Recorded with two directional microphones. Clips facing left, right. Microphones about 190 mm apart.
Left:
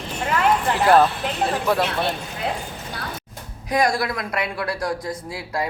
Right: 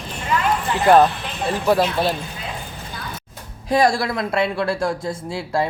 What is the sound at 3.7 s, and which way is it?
Speech, 30° right (ahead or behind).